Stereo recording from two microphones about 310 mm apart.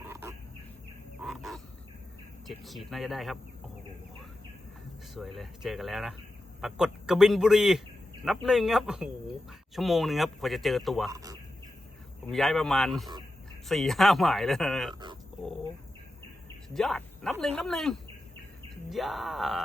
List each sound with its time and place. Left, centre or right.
0.1 s bird: centre
1.2 s frog: centre
2.6 s a man's voice: centre
5.1 s a man's voice: centre
11.1 s speech: centre
12.2 s a man's voice: centre
16.6 s a man's voice: centre